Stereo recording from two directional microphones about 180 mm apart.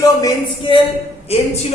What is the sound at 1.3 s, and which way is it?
Speech, 35° left (ahead or behind).